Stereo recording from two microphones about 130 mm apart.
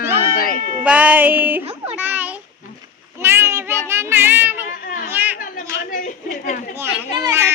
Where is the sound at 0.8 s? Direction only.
10° right (ahead or behind).